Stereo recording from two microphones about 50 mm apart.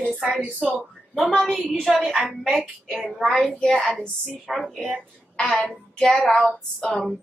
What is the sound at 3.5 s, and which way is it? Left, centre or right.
Speech, centre.